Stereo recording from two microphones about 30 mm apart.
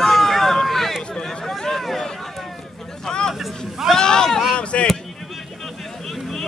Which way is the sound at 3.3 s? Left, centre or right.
Centre.